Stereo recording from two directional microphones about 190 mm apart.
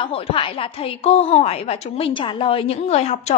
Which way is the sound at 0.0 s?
30° left (ahead or behind).